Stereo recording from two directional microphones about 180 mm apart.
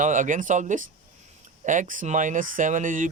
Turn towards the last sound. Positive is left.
turn(degrees=-45)  # may be behind; listen again after turning